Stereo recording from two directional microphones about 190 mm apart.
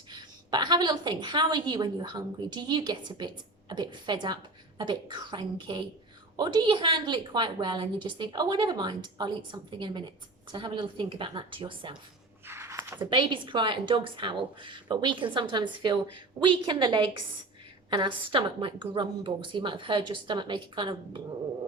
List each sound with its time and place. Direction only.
0.1 s a woman's voice: 25° right (ahead or behind)
12.5 s a sound: 15° right (ahead or behind)
13.1 s a woman's voice: 25° right (ahead or behind)